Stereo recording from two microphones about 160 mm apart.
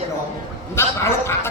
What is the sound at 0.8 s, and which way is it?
Speech, 15° left (ahead or behind).